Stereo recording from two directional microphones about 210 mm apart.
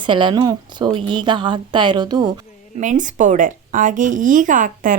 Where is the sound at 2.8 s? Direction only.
35° right (ahead or behind).